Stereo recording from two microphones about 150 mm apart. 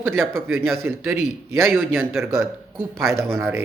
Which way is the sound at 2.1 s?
15° right (ahead or behind).